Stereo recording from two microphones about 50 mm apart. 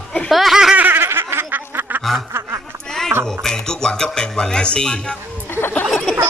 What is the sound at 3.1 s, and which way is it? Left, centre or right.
Speech, right.